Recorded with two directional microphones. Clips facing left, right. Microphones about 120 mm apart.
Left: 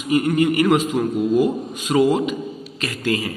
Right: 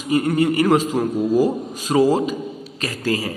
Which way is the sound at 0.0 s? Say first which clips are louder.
Even; 35° right (ahead or behind).